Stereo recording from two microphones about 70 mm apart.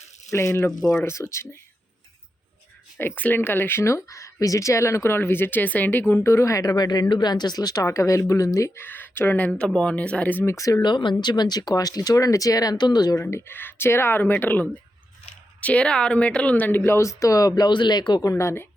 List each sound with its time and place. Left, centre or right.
0.3 s speech: left
3.0 s speech: left
6.2 s speech: left
7.2 s speech: left
7.9 s speech: left
8.7 s speech: left
9.5 s speech: centre
10.4 s speech: left
10.8 s speech: left
13.5 s speech: left
16.9 s speech: left
18.3 s speech: left